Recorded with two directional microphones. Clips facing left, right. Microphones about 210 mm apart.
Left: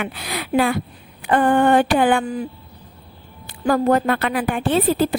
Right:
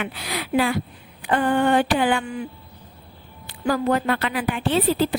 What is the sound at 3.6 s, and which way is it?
A woman's voice, 50° left (ahead or behind).